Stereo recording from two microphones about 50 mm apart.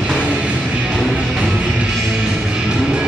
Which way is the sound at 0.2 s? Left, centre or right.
Right.